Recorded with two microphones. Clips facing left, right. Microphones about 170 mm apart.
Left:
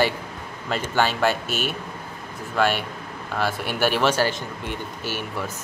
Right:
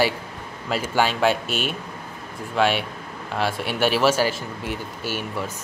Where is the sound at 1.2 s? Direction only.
5° left (ahead or behind).